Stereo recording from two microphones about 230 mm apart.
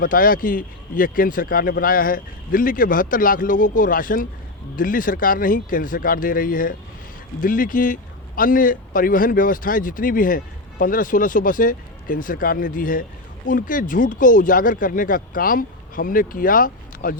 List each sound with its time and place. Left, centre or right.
0.0 s speech: left